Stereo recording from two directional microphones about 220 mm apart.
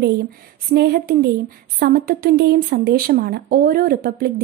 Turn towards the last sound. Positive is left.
turn(degrees=-45)  # may be behind; listen again after turning